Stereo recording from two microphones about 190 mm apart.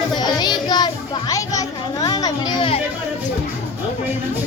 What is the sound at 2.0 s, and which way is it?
Speech, 20° left (ahead or behind).